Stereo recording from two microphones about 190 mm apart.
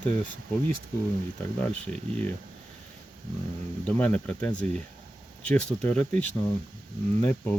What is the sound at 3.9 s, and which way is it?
Speech, 5° left (ahead or behind).